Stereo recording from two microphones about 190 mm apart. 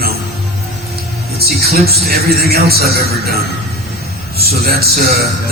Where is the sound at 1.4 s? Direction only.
55° right (ahead or behind).